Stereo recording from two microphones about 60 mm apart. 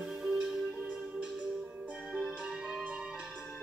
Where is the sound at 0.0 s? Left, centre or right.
Centre.